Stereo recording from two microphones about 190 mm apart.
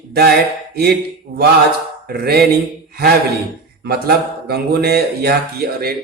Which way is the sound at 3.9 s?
55° right (ahead or behind).